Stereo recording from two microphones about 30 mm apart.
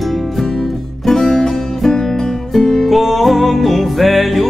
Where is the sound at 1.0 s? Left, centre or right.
Centre.